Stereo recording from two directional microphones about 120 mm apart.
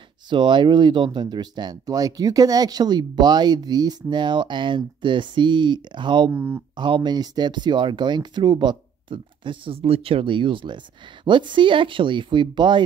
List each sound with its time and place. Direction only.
0.3 s speech: 40° right (ahead or behind)
6.3 s speech: 20° right (ahead or behind)
6.8 s speech: 40° right (ahead or behind)